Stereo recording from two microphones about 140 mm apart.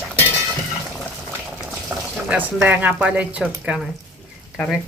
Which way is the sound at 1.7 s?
10° right (ahead or behind).